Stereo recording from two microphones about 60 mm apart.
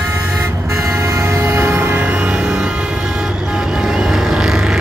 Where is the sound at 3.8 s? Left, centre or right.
Centre.